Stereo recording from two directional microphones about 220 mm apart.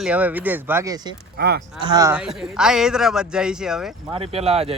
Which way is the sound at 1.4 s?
45° right (ahead or behind).